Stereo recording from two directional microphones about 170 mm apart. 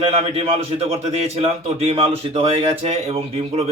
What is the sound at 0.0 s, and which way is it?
A man's voice, 35° right (ahead or behind).